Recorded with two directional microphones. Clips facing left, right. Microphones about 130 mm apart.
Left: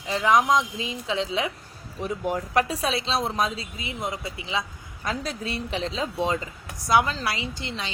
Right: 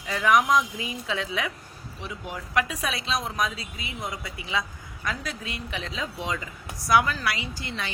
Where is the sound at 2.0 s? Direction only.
45° left (ahead or behind).